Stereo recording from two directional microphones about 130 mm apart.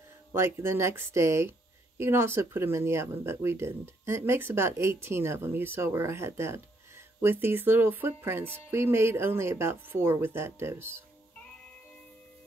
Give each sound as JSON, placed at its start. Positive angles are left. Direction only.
{"t": 0.3, "sound": "speech", "side_deg": -20}